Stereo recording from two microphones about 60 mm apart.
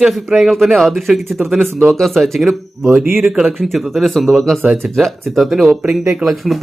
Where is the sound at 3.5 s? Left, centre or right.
Centre.